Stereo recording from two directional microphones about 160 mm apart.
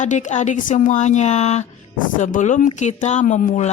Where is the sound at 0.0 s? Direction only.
50° left (ahead or behind).